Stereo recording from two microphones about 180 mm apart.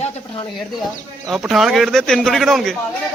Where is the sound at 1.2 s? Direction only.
Centre (ahead or behind).